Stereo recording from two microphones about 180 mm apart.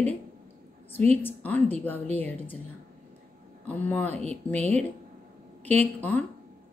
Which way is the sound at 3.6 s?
10° left (ahead or behind).